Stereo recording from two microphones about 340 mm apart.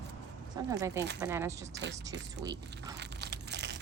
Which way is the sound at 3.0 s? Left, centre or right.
Right.